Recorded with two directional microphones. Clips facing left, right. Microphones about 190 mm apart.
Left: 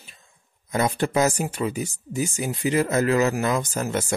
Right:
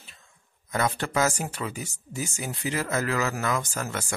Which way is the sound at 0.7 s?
20° left (ahead or behind).